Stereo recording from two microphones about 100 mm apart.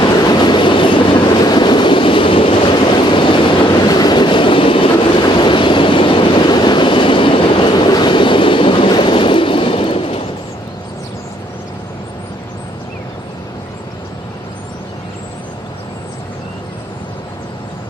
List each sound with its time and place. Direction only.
0.3 s train: 50° left (ahead or behind)
3.8 s train: 45° left (ahead or behind); by 10.2 s 65° left (ahead or behind)